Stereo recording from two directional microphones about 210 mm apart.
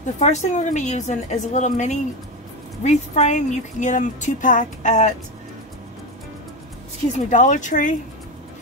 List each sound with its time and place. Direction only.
0.0 s speech: 35° left (ahead or behind)
7.2 s speech: 35° left (ahead or behind)